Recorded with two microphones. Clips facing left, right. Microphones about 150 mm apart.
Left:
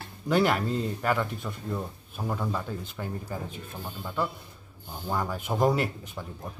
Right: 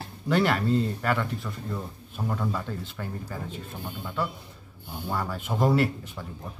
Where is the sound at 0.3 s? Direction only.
10° left (ahead or behind).